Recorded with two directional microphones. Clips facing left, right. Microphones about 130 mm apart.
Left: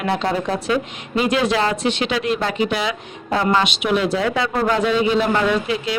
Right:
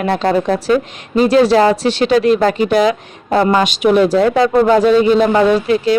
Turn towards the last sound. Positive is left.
turn(degrees=-40)  # may be behind; listen again after turning